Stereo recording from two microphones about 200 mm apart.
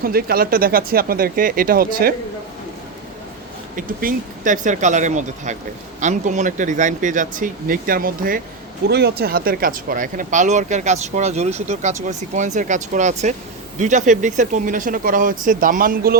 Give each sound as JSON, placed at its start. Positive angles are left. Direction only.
{"t": 0.0, "sound": "speech", "side_deg": -50}
{"t": 3.8, "sound": "speech", "side_deg": -40}